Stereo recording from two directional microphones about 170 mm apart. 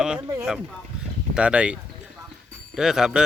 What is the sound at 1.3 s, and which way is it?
Speech, 5° right (ahead or behind).